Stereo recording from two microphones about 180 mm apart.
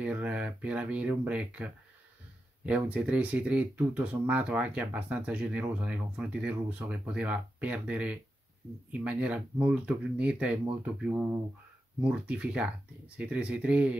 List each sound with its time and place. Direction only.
0.0 s speech: 5° right (ahead or behind)